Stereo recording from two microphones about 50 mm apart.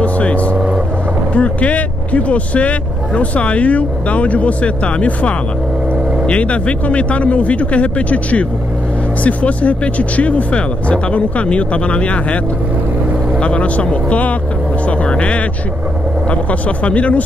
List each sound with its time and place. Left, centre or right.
0.0 s vehicle: left
1.3 s speech: left
13.4 s speech: left